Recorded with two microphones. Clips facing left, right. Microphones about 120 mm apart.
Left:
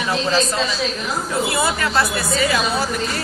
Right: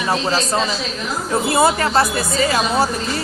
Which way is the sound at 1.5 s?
40° right (ahead or behind).